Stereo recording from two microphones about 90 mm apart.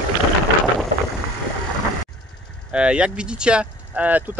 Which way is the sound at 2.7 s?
10° right (ahead or behind).